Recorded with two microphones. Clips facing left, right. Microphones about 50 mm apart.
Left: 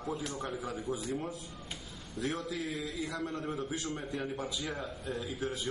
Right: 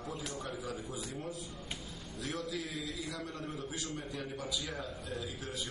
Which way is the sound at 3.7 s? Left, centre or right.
Left.